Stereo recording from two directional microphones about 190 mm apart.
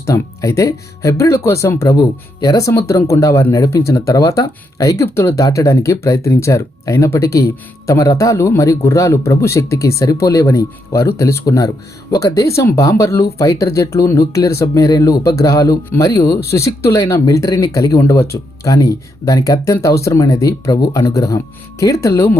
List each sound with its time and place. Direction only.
0.0 s speech: 15° left (ahead or behind)